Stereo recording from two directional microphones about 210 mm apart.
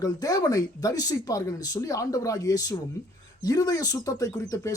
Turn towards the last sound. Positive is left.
turn(degrees=15)  # may be behind; listen again after turning